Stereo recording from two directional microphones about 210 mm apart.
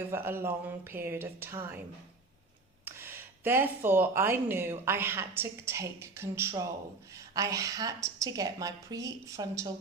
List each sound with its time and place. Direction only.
0.1 s speech: 10° right (ahead or behind)
2.8 s speech: 10° right (ahead or behind)